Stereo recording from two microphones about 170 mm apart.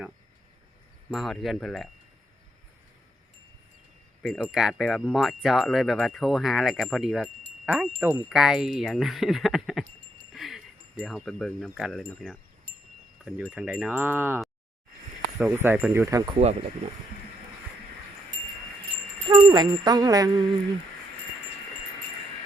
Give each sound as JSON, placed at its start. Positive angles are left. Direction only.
{"t": 1.1, "sound": "wind chime", "side_deg": 0}
{"t": 4.2, "sound": "speech", "side_deg": 10}
{"t": 4.4, "sound": "wind chime", "side_deg": 0}
{"t": 10.3, "sound": "a sound", "side_deg": 0}
{"t": 11.0, "sound": "wind chime", "side_deg": 0}
{"t": 16.4, "sound": "speech", "side_deg": -40}
{"t": 19.3, "sound": "jingle bell", "side_deg": -20}